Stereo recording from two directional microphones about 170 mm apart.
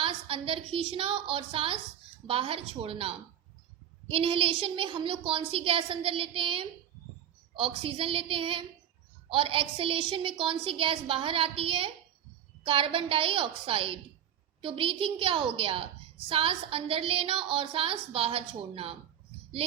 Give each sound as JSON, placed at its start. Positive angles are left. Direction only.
{"t": 0.0, "sound": "a woman's voice", "side_deg": -35}